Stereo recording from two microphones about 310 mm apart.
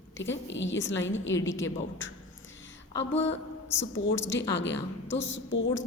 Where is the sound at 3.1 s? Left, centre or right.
Left.